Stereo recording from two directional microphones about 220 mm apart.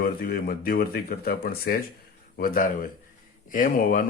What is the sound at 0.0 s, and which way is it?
Speech, 40° left (ahead or behind).